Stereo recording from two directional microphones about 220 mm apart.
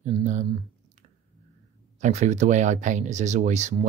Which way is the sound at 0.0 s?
30° right (ahead or behind).